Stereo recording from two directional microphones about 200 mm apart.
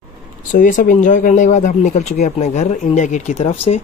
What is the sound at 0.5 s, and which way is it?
Speech, 40° left (ahead or behind).